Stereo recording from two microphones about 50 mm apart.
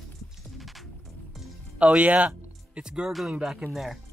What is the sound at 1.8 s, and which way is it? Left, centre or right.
Speech, right.